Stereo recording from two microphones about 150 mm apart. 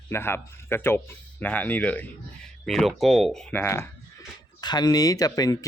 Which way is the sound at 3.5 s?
15° left (ahead or behind).